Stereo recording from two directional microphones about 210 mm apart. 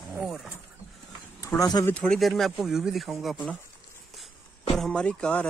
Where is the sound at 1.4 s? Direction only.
15° left (ahead or behind).